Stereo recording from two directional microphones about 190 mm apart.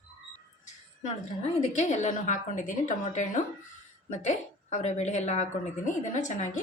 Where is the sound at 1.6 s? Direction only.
35° left (ahead or behind).